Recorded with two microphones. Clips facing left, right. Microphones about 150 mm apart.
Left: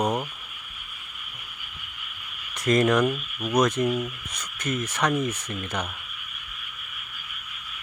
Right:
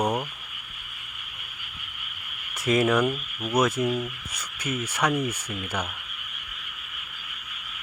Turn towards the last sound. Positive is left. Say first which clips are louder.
# even
turn(degrees=-10)  # may be behind; listen again after turning